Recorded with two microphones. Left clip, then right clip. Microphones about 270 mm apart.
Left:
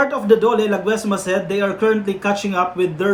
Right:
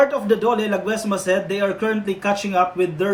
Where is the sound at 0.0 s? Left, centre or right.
Centre.